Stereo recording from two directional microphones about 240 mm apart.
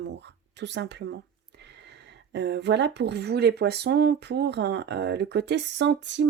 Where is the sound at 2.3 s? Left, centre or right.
Right.